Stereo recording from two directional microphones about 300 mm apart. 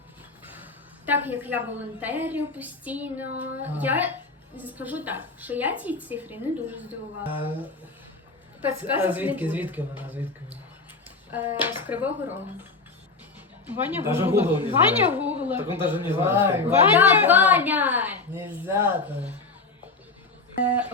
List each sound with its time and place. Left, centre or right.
0.4 s a woman's voice: centre
8.8 s a woman's voice: centre
13.7 s a woman's voice: centre
20.7 s a woman's voice: centre